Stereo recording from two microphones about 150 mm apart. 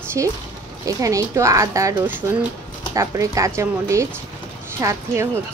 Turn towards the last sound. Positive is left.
turn(degrees=-20)  # may be behind; listen again after turning